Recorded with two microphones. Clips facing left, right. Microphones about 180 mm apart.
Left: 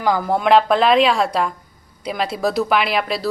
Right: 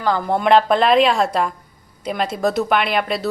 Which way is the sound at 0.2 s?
Centre (ahead or behind).